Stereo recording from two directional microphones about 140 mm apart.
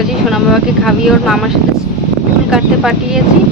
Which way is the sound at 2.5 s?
5° right (ahead or behind).